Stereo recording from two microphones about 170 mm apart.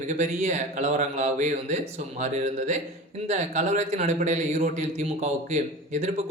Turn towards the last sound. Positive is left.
turn(degrees=-45)  # may be behind; listen again after turning